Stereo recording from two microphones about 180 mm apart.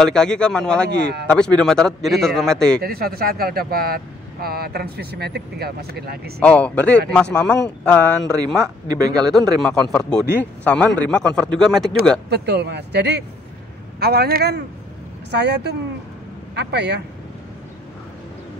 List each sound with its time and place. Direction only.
0.0 s a man's voice: 5° left (ahead or behind)
2.8 s speech: 55° right (ahead or behind)
6.4 s a man's voice: 5° left (ahead or behind)
8.5 s speech: 20° right (ahead or behind)
9.3 s a man's voice: centre (ahead or behind)
12.3 s a man's voice: 70° right (ahead or behind)